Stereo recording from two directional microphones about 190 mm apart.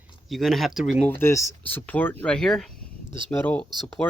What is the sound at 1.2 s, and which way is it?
Speech, 15° left (ahead or behind).